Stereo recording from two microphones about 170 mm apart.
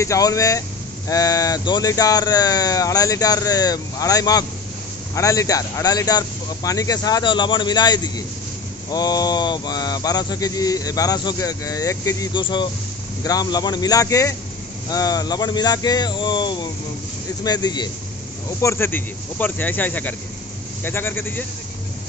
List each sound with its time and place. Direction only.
0.0 s speech: 20° left (ahead or behind)